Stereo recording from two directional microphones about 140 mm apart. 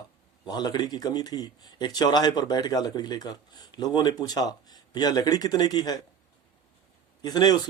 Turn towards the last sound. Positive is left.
turn(degrees=30)  # may be behind; listen again after turning